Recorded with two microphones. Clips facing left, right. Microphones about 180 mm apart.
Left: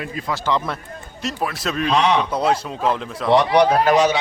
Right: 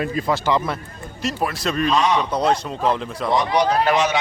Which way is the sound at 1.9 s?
65° left (ahead or behind).